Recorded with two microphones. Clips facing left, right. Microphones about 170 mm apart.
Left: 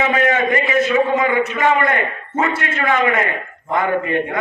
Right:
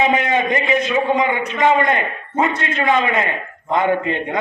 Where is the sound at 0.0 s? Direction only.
20° right (ahead or behind).